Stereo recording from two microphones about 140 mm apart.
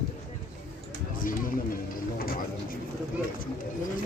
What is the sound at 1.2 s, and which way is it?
Speech, 85° left.